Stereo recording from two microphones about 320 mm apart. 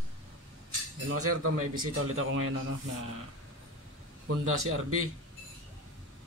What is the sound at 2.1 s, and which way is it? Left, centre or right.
Speech, right.